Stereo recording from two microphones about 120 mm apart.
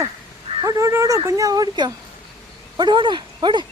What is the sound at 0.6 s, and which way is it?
Speech, 30° right (ahead or behind).